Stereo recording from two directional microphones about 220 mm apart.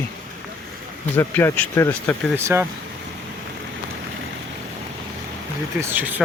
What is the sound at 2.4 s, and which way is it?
Speech, 10° right (ahead or behind).